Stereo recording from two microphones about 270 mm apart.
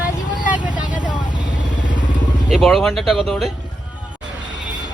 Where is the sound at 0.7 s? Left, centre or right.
Left.